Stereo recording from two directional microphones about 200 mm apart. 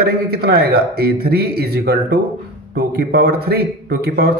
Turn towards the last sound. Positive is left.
turn(degrees=-50)  # may be behind; listen again after turning